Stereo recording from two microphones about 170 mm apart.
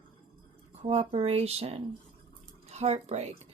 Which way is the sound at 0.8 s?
35° right (ahead or behind).